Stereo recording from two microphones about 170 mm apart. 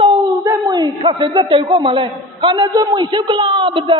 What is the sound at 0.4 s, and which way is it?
A man's voice, 20° right (ahead or behind).